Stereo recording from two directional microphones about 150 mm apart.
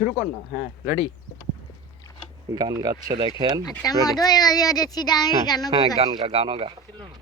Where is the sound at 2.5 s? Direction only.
25° right (ahead or behind).